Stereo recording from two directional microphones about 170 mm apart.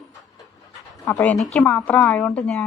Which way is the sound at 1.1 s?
10° left (ahead or behind).